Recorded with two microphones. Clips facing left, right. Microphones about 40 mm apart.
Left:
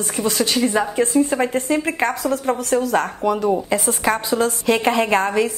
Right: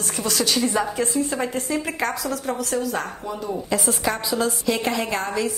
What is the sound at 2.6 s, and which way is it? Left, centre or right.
A woman's voice, left.